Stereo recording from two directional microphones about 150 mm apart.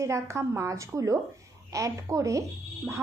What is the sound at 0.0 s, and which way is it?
A woman's voice, 20° right (ahead or behind).